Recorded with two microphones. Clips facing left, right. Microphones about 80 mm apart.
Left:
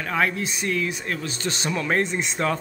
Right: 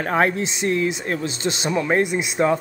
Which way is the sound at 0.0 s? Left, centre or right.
Right.